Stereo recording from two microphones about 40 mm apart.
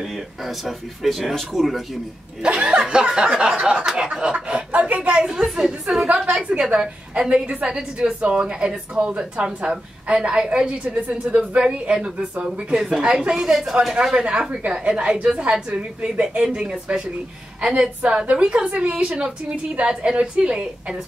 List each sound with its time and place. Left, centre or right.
0.0 s speech: centre
2.4 s speech: right
5.3 s a woman's voice: centre
6.6 s speech: right
10.7 s a woman's voice: right; by 13.0 s centre
13.0 s speech: right
13.3 s a woman's voice: centre
14.1 s a woman's voice: right
19.0 s a woman's voice: centre
19.5 s a woman's voice: right